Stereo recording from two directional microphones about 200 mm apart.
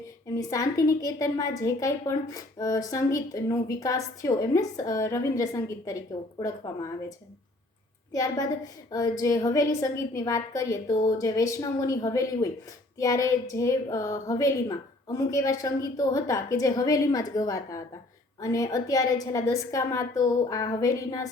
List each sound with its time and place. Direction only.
0.3 s a woman's voice: 15° left (ahead or behind)
8.1 s a woman's voice: 20° left (ahead or behind)